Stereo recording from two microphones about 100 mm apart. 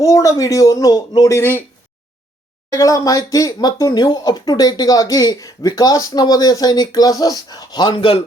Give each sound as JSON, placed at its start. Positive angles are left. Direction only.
{"t": 0.0, "sound": "speech", "side_deg": 35}
{"t": 1.4, "sound": "speech", "side_deg": 25}
{"t": 2.7, "sound": "speech", "side_deg": 35}
{"t": 7.9, "sound": "a man's voice", "side_deg": 65}